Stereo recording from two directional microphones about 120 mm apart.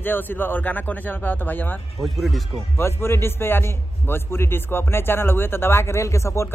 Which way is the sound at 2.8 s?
20° left (ahead or behind).